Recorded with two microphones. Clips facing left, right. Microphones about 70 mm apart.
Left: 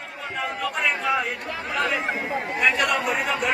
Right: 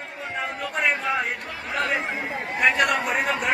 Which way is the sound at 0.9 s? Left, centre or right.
Centre.